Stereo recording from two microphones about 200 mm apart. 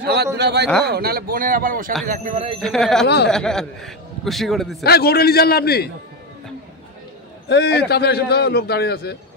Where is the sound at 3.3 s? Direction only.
Centre (ahead or behind).